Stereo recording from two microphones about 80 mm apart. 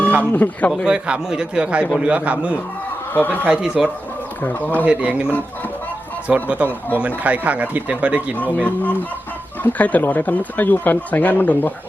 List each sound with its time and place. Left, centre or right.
0.2 s speech: centre
0.9 s a man's voice: centre
3.1 s speech: left
3.4 s a man's voice: centre
4.4 s speech: left
4.9 s a man's voice: centre
8.6 s speech: centre